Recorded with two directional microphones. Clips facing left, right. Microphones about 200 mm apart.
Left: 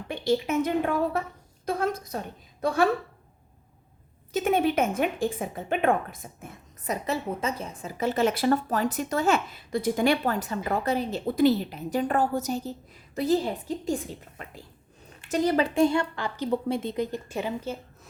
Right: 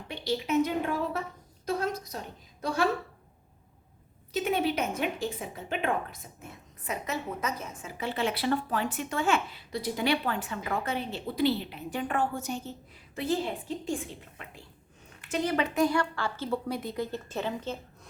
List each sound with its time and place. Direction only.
0.1 s speech: 50° left (ahead or behind)
1.6 s a sound: 55° left (ahead or behind)
4.3 s a woman's voice: 50° left (ahead or behind); by 17.7 s 10° left (ahead or behind)